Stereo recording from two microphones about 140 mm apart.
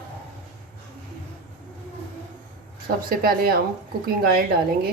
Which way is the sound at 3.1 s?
90° right.